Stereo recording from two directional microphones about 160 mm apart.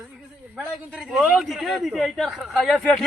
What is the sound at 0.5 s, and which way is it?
A man's voice, 5° right (ahead or behind).